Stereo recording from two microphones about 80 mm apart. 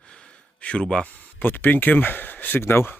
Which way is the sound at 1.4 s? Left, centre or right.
Left.